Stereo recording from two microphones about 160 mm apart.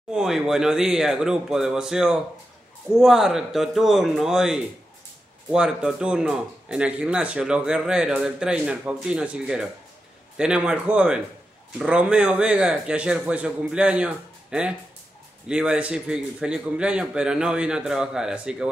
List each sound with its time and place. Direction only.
0.1 s a man's voice: 5° right (ahead or behind)